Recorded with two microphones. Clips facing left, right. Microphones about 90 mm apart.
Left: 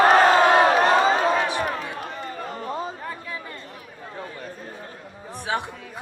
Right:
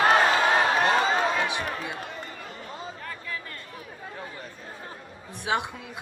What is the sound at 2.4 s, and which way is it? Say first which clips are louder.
Chatter: left 9 dB; 45° left (ahead or behind).